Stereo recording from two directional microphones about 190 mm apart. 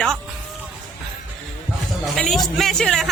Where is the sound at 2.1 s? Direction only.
Centre (ahead or behind).